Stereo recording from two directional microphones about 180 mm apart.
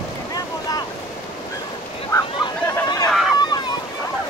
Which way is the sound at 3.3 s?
25° left (ahead or behind).